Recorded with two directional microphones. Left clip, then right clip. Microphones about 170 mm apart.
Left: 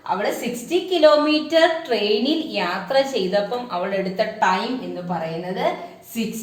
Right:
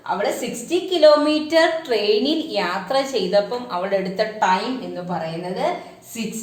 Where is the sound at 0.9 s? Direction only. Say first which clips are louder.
Right 1 dB; 25° right (ahead or behind).